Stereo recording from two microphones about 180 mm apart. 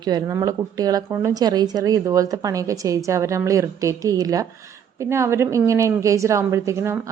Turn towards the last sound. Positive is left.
turn(degrees=-15)  # may be behind; listen again after turning